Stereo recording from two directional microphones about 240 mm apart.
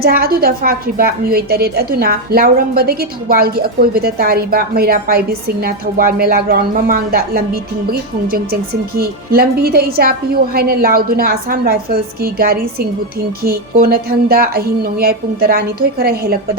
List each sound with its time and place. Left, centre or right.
0.0 s a woman's voice: right